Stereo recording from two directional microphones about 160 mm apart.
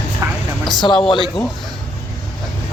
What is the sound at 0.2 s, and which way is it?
Vehicle, 15° right (ahead or behind).